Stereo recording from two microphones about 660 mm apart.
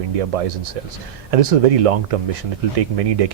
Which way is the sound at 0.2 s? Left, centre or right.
Right.